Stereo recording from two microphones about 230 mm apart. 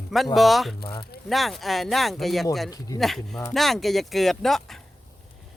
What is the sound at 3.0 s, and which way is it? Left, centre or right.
Speech, centre.